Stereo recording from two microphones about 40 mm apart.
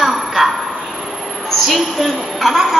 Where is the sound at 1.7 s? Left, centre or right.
Centre.